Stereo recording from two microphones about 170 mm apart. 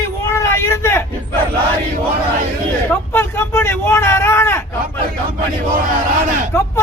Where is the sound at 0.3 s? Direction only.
15° left (ahead or behind).